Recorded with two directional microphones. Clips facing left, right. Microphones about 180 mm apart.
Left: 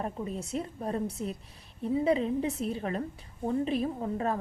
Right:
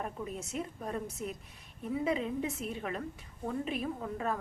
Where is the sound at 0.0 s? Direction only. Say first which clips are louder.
Left 4 dB; 30° left (ahead or behind).